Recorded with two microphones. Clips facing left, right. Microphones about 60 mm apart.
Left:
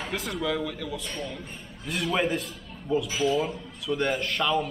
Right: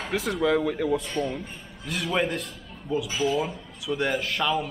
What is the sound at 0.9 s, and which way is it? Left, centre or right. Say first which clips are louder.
A man's voice: right 6 dB; centre.